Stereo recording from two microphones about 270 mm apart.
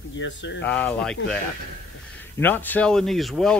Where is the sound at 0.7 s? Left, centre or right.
Centre.